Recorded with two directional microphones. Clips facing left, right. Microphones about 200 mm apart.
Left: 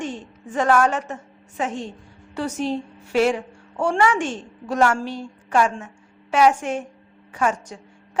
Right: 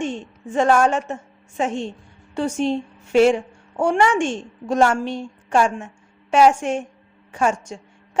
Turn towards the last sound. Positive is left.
turn(degrees=-25)  # may be behind; listen again after turning